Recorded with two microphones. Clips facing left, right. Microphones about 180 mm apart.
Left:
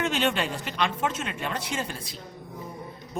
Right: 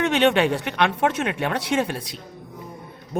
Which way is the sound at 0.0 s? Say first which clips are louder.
Right 8 dB; 65° right (ahead or behind).